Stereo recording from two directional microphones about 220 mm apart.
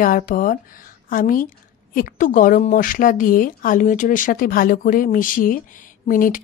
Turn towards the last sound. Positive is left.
turn(degrees=40)  # may be behind; listen again after turning